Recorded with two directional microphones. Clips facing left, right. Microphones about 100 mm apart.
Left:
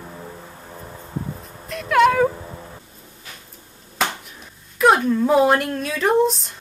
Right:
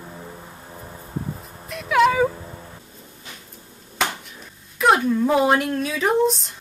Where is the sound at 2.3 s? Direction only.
15° left (ahead or behind).